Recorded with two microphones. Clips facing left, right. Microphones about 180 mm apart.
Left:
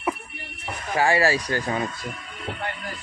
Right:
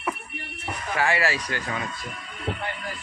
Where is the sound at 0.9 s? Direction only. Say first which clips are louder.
Left 4 dB; 35° left (ahead or behind).